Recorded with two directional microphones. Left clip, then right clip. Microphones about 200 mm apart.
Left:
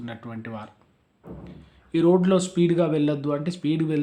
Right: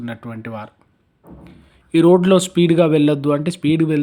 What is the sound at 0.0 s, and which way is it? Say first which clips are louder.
Speech: right 6 dB; 35° right (ahead or behind).